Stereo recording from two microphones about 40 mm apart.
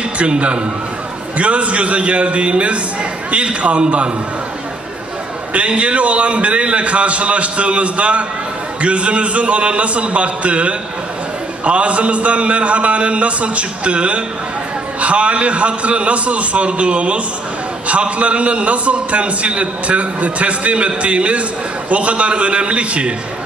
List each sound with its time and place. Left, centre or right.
0.2 s a man's voice: right
5.5 s a man's voice: right